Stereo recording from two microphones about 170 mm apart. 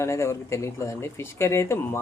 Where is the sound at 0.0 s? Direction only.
15° left (ahead or behind).